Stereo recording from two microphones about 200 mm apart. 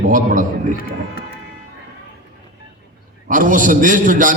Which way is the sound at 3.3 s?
40° right (ahead or behind).